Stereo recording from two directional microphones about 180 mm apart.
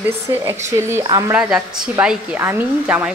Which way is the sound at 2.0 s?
5° right (ahead or behind).